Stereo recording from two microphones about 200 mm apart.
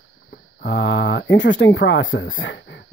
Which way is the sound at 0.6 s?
60° left (ahead or behind).